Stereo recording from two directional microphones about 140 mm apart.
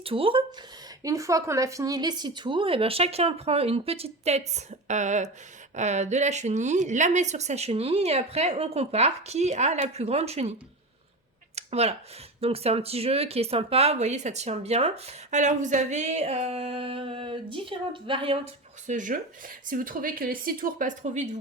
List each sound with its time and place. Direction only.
0.0 s speech: 40° right (ahead or behind)
1.0 s speech: 25° right (ahead or behind); by 10.5 s 50° right (ahead or behind)
11.5 s a sound: 50° right (ahead or behind)
12.4 s speech: 45° right (ahead or behind)
18.9 s speech: 65° right (ahead or behind)
19.6 s speech: 80° right; by 21.3 s 60° right (ahead or behind)